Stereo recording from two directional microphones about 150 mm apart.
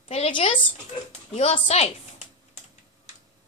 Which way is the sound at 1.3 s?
45° left (ahead or behind).